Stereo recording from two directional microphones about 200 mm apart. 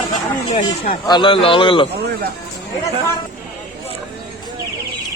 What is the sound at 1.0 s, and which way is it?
Speech, 25° left (ahead or behind).